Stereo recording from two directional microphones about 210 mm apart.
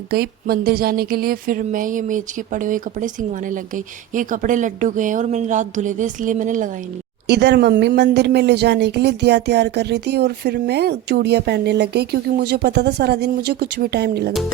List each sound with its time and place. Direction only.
0.1 s speech: 45° right (ahead or behind)
7.3 s speech: 55° right (ahead or behind)